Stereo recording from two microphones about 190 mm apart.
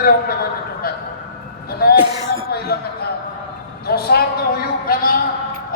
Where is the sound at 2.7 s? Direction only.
55° left (ahead or behind).